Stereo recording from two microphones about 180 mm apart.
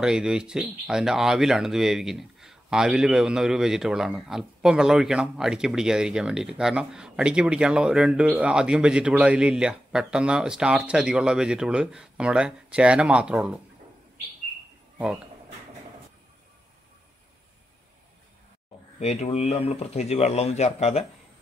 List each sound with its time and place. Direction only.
0.0 s speech: 5° right (ahead or behind)
18.9 s speech: 35° left (ahead or behind)